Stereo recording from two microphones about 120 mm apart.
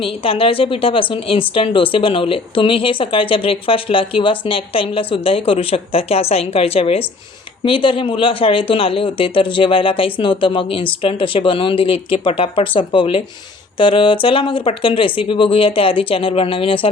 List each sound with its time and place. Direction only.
0.0 s a woman's voice: 50° left (ahead or behind)